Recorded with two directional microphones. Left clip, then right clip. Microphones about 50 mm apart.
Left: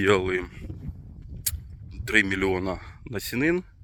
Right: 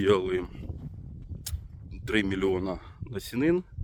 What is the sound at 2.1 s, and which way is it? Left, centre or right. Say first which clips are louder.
Speech: left 4 dB; right.